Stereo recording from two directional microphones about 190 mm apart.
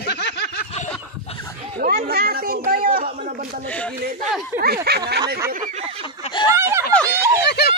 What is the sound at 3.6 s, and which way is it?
Speech, 5° left (ahead or behind).